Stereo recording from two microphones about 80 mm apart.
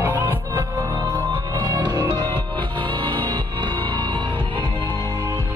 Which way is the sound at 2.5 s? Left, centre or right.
Right.